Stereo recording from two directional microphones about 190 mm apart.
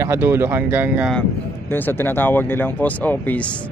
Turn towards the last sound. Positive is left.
turn(degrees=10)  # may be behind; listen again after turning